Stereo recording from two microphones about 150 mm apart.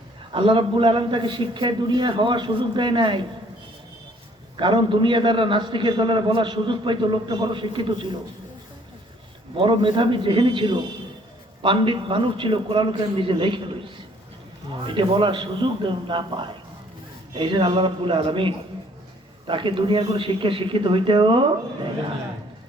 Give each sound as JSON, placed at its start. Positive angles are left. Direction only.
{"t": 0.3, "sound": "a man's voice", "side_deg": -35}
{"t": 4.5, "sound": "a man's voice", "side_deg": -30}
{"t": 9.6, "sound": "a man's voice", "side_deg": -35}